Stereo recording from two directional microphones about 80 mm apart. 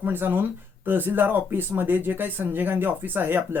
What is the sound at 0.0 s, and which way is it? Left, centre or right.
Speech, right.